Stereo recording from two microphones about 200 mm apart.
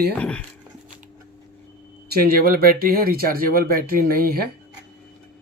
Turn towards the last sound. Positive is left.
turn(degrees=-45)  # may be behind; listen again after turning